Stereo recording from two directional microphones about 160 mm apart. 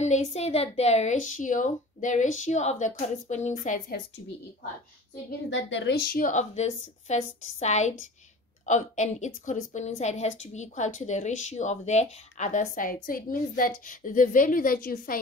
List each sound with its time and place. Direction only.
0.0 s a woman's voice: 45° left (ahead or behind)
5.8 s a woman's voice: 80° left; by 15.1 s 65° left (ahead or behind)